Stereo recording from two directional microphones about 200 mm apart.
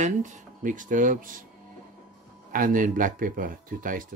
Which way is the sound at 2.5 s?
45° right (ahead or behind).